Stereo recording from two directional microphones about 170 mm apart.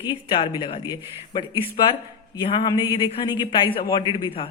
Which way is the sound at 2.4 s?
30° left (ahead or behind).